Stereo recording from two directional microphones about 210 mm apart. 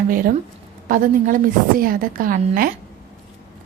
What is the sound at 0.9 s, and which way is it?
A woman's voice, 40° right (ahead or behind).